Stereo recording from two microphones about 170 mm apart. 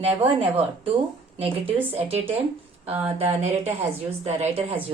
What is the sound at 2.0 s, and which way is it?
Speech, 35° right (ahead or behind).